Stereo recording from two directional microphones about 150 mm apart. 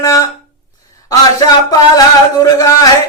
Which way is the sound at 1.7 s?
25° left (ahead or behind).